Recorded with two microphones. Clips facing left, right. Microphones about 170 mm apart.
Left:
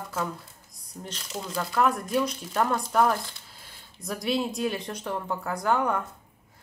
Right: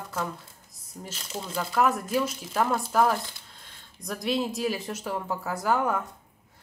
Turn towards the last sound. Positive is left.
turn(degrees=-5)  # may be behind; listen again after turning